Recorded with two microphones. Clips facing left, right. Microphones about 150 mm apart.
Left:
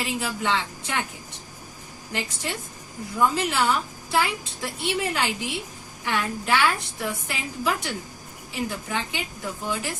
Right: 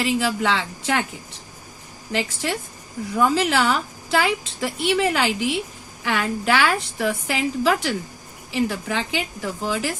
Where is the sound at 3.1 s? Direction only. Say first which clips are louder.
Right 4 dB; 85° right.